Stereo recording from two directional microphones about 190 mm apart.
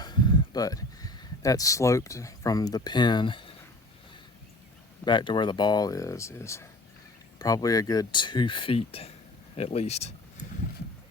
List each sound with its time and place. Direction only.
0.0 s speech: 20° left (ahead or behind)
5.0 s speech: 25° left (ahead or behind)